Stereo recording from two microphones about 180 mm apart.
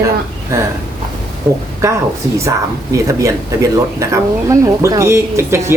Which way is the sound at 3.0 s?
15° right (ahead or behind).